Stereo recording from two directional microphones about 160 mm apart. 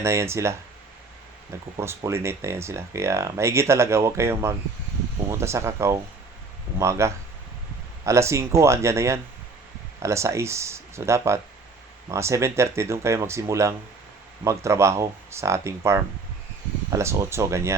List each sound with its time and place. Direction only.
0.0 s speech: 15° right (ahead or behind)
1.7 s speech: 20° right (ahead or behind)